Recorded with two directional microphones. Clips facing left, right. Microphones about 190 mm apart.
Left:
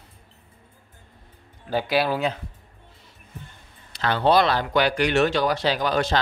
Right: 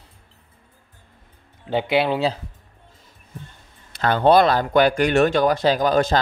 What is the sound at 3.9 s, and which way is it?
Speech, 50° right (ahead or behind).